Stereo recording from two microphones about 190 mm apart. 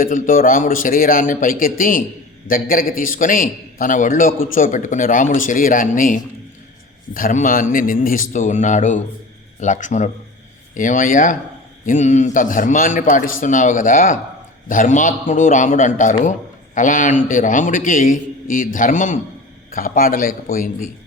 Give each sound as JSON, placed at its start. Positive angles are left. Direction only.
{"t": 0.0, "sound": "a man's voice", "side_deg": 45}